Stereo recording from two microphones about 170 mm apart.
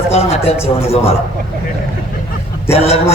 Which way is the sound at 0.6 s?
35° left (ahead or behind).